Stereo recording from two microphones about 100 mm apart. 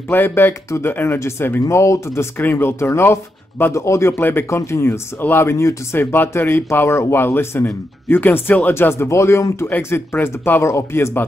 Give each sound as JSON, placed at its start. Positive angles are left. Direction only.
{"t": 0.1, "sound": "speech", "side_deg": 20}